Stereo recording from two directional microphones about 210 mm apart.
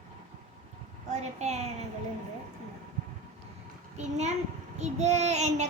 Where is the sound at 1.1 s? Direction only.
35° right (ahead or behind).